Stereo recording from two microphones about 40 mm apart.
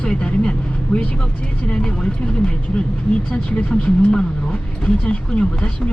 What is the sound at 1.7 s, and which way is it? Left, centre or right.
Speech, centre.